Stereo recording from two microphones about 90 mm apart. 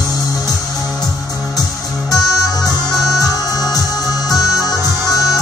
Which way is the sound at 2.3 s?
Centre (ahead or behind).